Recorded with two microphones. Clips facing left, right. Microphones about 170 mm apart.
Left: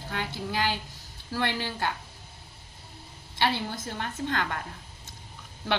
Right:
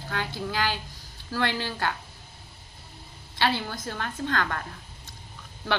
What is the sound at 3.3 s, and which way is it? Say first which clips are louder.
A woman's voice: right 1 dB; 20° left (ahead or behind).